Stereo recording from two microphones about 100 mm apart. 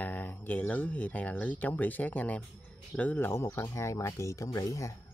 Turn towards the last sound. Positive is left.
turn(degrees=35)  # may be behind; listen again after turning